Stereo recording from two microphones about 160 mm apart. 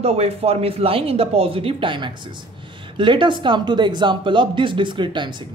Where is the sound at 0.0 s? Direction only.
40° right (ahead or behind).